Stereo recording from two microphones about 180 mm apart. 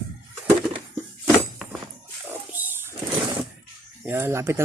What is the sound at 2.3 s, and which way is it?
Dog, 10° right (ahead or behind).